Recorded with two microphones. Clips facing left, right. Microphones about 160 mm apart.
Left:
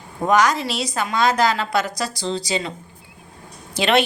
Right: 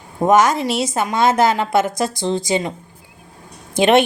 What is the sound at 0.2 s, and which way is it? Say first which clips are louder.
A woman's voice: right 4 dB; 20° right (ahead or behind).